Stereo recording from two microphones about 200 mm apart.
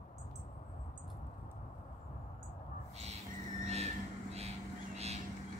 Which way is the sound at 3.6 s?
30° right (ahead or behind).